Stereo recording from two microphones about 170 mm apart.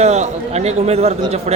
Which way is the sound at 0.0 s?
40° right (ahead or behind).